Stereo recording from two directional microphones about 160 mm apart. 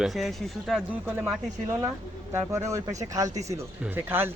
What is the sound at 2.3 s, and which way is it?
Speech, 15° right (ahead or behind).